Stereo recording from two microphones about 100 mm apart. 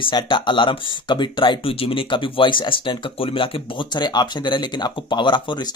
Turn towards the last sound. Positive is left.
turn(degrees=50)  # may be behind; listen again after turning